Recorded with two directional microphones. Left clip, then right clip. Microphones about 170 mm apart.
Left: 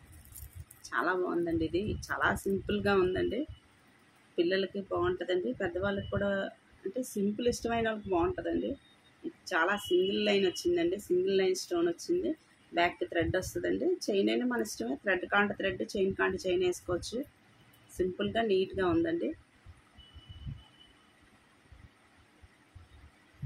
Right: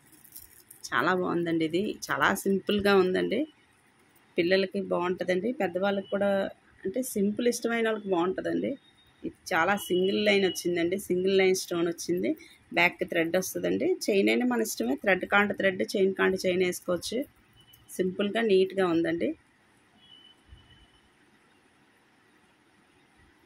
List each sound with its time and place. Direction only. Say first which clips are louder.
0.8 s speech: right 4 dB; 55° right (ahead or behind)
4.4 s speech: right 5 dB; 55° right (ahead or behind)